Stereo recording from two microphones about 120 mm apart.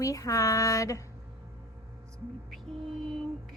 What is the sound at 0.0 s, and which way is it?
Speech, 30° left (ahead or behind).